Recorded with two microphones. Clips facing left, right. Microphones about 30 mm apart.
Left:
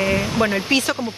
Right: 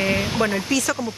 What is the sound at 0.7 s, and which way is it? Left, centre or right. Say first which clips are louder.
Speech: left 3 dB; left.